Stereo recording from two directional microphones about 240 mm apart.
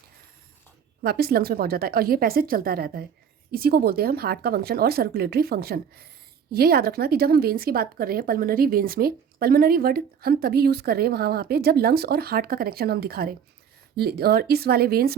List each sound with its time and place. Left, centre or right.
1.0 s speech: right